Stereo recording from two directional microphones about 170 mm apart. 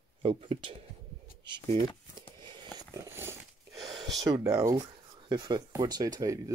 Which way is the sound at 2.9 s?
15° right (ahead or behind).